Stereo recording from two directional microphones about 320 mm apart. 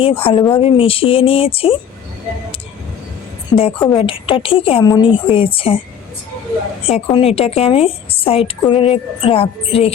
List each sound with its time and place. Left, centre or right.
0.0 s a woman's voice: centre
3.5 s a woman's voice: centre
6.8 s a woman's voice: centre